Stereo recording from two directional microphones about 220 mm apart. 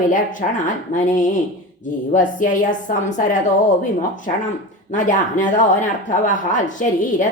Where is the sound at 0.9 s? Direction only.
35° left (ahead or behind).